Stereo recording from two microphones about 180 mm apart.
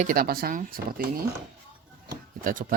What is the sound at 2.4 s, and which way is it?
Speech, 50° right (ahead or behind).